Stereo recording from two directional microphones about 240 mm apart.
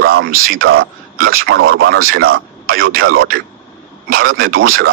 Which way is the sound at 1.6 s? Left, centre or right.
Right.